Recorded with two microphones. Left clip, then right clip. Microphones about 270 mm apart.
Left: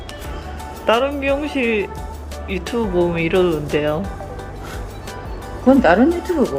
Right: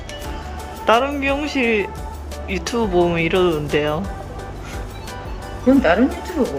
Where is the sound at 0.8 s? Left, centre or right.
Centre.